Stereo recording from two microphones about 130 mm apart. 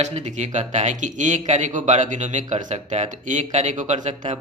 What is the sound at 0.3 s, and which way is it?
Speech, 65° right (ahead or behind).